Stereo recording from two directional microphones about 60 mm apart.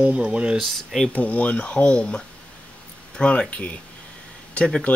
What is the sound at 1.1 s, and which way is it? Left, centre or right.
Speech, left.